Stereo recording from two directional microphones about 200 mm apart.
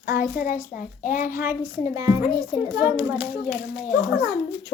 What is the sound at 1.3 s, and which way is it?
A child's voice, 10° right (ahead or behind).